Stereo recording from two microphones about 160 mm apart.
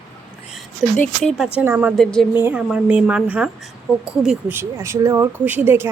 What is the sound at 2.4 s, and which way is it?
A woman's voice, 10° right (ahead or behind).